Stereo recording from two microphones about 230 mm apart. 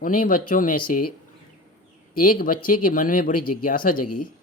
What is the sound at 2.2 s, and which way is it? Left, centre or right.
Speech, left.